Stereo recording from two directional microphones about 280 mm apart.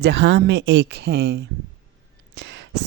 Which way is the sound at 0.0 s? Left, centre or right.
Right.